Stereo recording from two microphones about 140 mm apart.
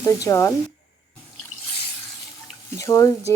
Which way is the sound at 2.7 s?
25° left (ahead or behind).